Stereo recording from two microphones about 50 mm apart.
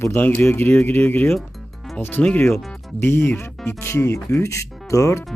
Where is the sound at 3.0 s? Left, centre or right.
Left.